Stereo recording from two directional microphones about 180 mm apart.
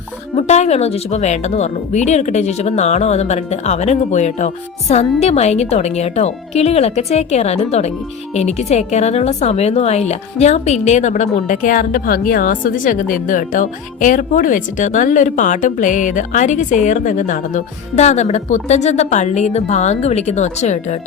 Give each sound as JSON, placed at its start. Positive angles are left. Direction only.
{"t": 0.3, "sound": "speech", "side_deg": 40}